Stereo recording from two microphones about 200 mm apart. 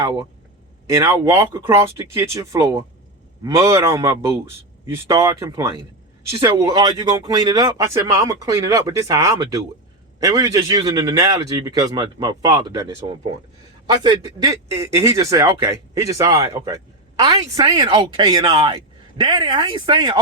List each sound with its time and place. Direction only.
0.0 s speech: 20° right (ahead or behind)